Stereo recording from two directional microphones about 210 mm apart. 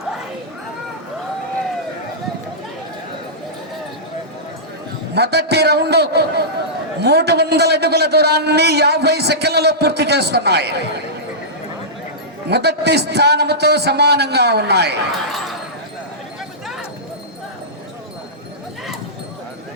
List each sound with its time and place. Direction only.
5.1 s a man's voice: 50° right (ahead or behind)
12.5 s a man's voice: 50° right (ahead or behind)
15.3 s a sound: centre (ahead or behind)